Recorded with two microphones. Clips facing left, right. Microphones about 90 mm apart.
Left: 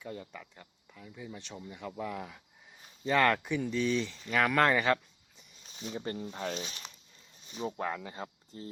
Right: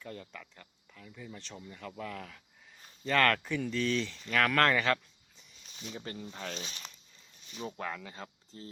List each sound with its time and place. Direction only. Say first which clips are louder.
0.0 s speech: left 2 dB; 10° left (ahead or behind)